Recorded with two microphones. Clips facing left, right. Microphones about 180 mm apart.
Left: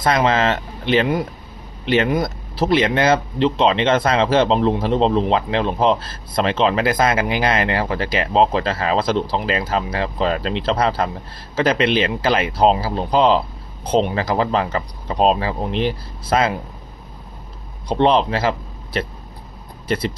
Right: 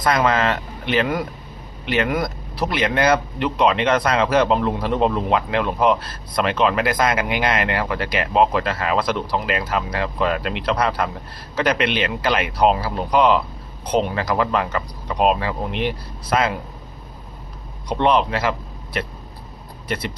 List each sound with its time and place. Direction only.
0.0 s speech: 25° left (ahead or behind)
17.8 s speech: 30° left (ahead or behind)
19.9 s speech: 30° left (ahead or behind)